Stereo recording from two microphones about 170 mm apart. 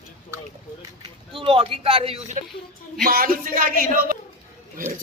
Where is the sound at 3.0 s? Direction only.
55° right (ahead or behind).